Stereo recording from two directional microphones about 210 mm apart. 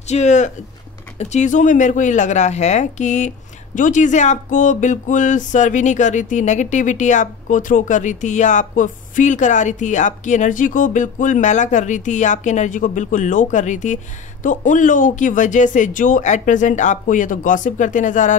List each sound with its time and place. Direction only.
0.0 s speech: 35° left (ahead or behind)